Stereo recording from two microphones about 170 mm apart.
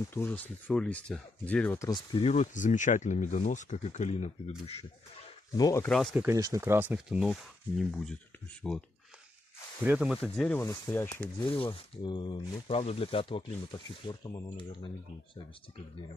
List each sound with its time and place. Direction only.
0.1 s speech: 10° left (ahead or behind)
1.9 s speech: 25° left (ahead or behind)
2.3 s speech: 50° left (ahead or behind)
5.6 s speech: 20° left (ahead or behind)
6.1 s speech: 15° right (ahead or behind); by 8.8 s 5° left (ahead or behind)
9.8 s speech: 5° right (ahead or behind)
10.6 s speech: 15° left (ahead or behind)
11.3 s speech: 30° left (ahead or behind)
12.7 s speech: 35° left (ahead or behind)